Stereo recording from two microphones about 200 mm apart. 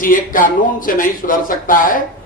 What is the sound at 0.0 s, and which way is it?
A man's voice, 45° left (ahead or behind).